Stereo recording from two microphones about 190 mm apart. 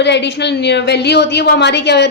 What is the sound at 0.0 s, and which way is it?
A woman's voice, 65° left (ahead or behind).